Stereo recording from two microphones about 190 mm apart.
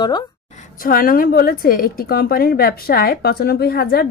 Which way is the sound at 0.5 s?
45° left (ahead or behind).